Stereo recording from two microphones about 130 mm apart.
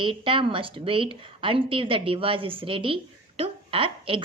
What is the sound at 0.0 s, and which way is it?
A woman's voice, 40° right (ahead or behind).